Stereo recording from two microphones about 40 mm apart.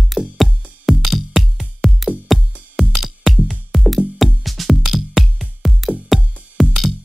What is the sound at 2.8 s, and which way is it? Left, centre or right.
Music, centre.